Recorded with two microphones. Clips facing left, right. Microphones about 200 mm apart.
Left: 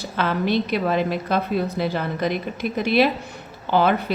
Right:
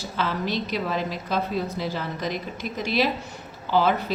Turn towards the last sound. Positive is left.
turn(degrees=60)  # may be behind; listen again after turning